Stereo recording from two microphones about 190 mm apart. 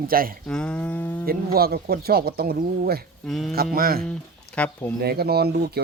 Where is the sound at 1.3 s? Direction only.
55° right (ahead or behind).